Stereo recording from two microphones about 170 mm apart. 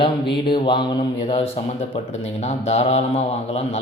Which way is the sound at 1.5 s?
40° left (ahead or behind).